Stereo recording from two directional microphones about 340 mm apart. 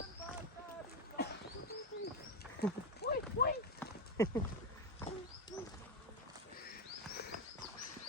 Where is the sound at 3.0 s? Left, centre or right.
Left.